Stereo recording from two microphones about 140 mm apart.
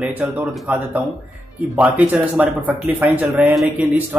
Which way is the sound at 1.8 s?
10° right (ahead or behind).